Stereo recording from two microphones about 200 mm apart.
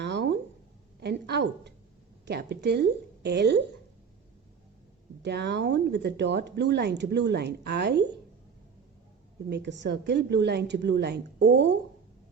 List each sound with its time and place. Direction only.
0.0 s a sound: 60° right (ahead or behind)
0.9 s speech: 55° right (ahead or behind)
5.2 s speech: 55° right (ahead or behind)
9.5 s speech: 60° right (ahead or behind)